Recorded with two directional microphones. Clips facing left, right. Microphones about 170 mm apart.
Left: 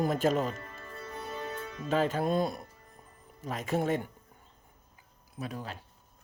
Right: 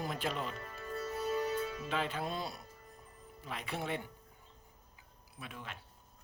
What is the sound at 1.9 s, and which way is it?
Speech, 40° left (ahead or behind).